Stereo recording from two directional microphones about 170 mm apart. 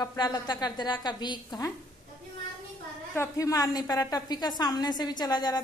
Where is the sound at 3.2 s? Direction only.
20° left (ahead or behind).